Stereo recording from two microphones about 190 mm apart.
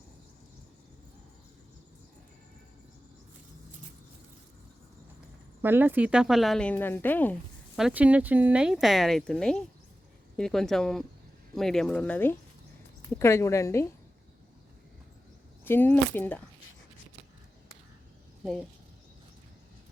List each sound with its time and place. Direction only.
5.6 s speech: 10° right (ahead or behind); by 7.3 s 10° left (ahead or behind)
7.8 s speech: 5° right (ahead or behind); by 13.8 s 15° left (ahead or behind)
15.6 s speech: 10° left (ahead or behind)